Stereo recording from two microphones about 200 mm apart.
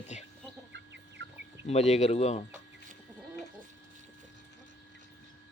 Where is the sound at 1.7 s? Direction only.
35° left (ahead or behind).